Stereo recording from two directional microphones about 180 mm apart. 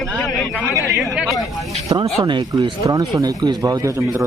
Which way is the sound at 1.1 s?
Centre (ahead or behind).